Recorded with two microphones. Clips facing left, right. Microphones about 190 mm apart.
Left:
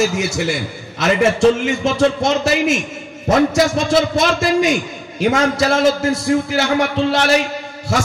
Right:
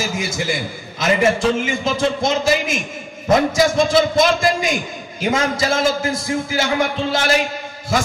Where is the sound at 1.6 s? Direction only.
70° left (ahead or behind).